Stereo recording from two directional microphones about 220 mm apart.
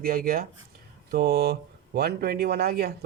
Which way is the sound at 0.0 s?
40° right (ahead or behind).